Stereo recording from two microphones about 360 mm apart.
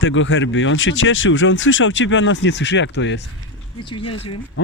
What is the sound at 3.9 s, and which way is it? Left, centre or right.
Speech, centre.